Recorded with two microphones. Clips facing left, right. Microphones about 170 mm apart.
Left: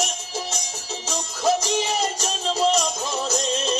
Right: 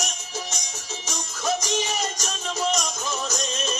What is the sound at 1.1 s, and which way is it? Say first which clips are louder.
Music: left 5 dB; 30° left (ahead or behind).